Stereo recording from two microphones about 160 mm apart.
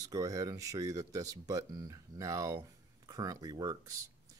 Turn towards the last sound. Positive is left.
turn(degrees=-20)  # may be behind; listen again after turning